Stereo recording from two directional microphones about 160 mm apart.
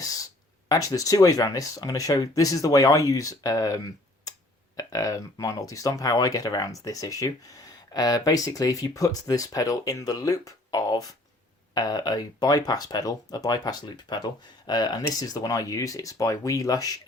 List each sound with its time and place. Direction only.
0.0 s a sound: 20° left (ahead or behind)
0.7 s speech: 20° left (ahead or behind)
4.8 s speech: 20° left (ahead or behind)